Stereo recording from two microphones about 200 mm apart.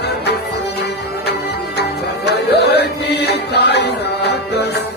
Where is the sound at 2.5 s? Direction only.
55° left (ahead or behind).